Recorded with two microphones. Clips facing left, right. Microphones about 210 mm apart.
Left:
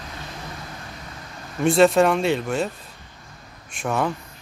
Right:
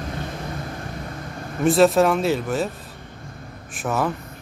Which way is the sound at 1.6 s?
Centre (ahead or behind).